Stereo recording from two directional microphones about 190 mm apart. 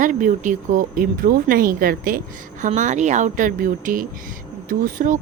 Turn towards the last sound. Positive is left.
turn(degrees=-45)  # may be behind; listen again after turning